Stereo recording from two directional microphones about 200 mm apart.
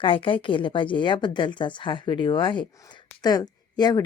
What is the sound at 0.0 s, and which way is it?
Speech, 25° left (ahead or behind).